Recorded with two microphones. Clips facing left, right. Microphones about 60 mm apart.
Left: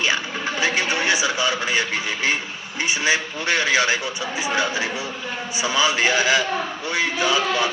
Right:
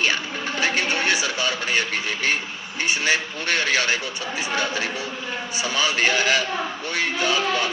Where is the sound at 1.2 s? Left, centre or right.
Centre.